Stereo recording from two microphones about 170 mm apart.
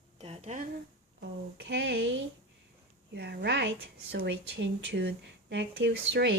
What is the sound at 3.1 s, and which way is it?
Speech, 85° right.